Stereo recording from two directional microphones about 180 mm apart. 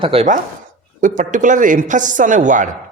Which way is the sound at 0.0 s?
30° right (ahead or behind).